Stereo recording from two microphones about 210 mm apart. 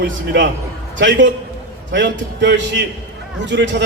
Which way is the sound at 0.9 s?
60° right (ahead or behind).